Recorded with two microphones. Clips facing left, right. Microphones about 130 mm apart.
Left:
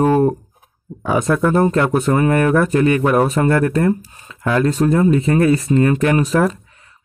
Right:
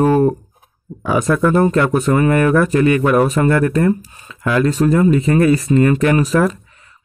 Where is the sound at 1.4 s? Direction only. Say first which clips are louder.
Right 2 dB; 30° left (ahead or behind).